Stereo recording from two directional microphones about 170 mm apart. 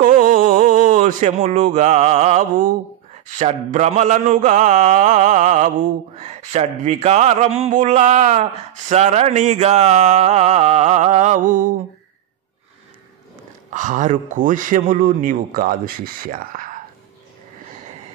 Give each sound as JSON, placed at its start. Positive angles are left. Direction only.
{"t": 0.0, "sound": "a sound", "side_deg": -55}
{"t": 3.3, "sound": "mantra", "side_deg": -45}
{"t": 13.7, "sound": "mantra", "side_deg": -45}